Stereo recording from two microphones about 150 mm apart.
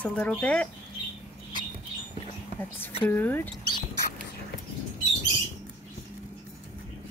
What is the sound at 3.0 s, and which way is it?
Speech, 10° left (ahead or behind).